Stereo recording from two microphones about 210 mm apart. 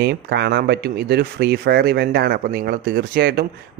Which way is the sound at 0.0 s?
55° right (ahead or behind).